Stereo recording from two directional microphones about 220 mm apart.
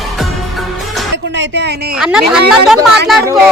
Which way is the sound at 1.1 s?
55° right (ahead or behind).